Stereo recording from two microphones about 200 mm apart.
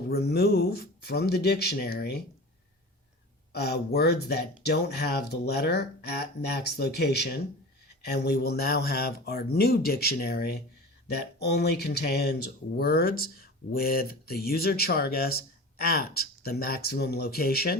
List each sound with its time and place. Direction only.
0.1 s speech: 50° left (ahead or behind)
3.5 s speech: 55° left (ahead or behind)